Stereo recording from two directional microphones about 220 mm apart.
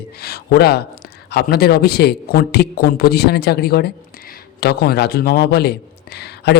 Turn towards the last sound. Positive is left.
turn(degrees=50)  # may be behind; listen again after turning